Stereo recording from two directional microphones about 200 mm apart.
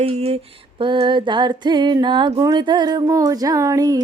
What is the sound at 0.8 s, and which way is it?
Music, 25° right (ahead or behind).